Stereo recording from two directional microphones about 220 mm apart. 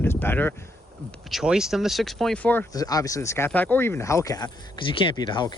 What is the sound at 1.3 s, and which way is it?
Speech, centre (ahead or behind).